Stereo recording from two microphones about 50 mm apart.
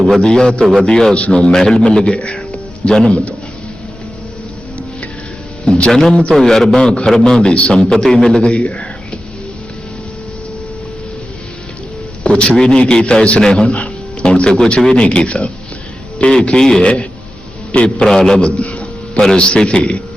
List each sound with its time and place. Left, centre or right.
0.2 s a man's voice: centre
5.6 s a man's voice: left
12.2 s a man's voice: left
13.4 s a sound: centre
14.3 s a man's voice: centre
18.0 s a man's voice: centre